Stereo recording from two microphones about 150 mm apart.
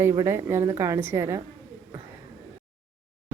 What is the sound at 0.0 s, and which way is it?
Speech, 15° right (ahead or behind).